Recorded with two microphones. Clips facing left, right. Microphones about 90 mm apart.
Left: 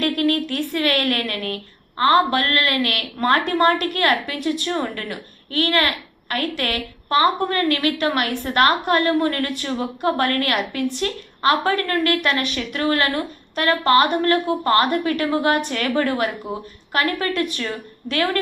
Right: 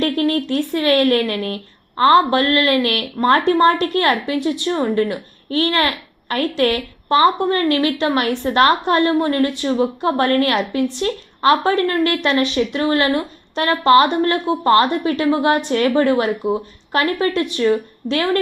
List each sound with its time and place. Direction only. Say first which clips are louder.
0.0 s speech: right 2 dB; 25° right (ahead or behind)